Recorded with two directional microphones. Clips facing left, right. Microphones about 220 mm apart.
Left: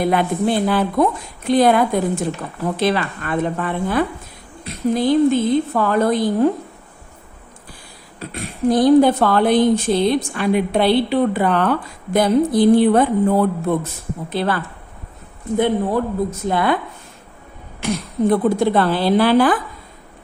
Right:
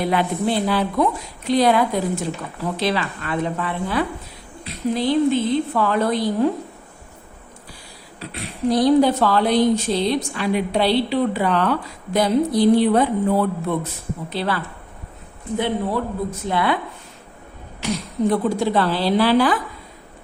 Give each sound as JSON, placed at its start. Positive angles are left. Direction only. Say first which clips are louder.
{"t": 0.0, "sound": "a woman's voice", "louder": "left 3 dB", "side_deg": 50}
{"t": 8.2, "sound": "a woman's voice", "louder": "left 3 dB", "side_deg": 45}
{"t": 17.7, "sound": "a woman's voice", "louder": "left 2 dB", "side_deg": 55}